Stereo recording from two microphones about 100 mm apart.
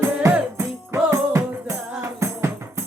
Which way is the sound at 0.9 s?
30° right (ahead or behind).